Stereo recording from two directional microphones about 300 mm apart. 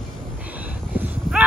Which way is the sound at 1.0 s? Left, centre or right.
Centre.